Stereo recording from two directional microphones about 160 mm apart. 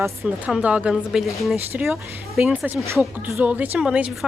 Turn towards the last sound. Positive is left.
turn(degrees=-5)  # may be behind; listen again after turning